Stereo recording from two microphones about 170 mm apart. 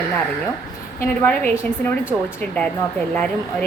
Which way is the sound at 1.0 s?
15° left (ahead or behind).